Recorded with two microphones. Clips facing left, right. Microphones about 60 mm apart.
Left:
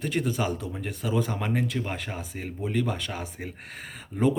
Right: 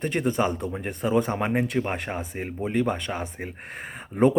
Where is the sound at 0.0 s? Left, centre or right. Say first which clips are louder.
Right 3 dB; right.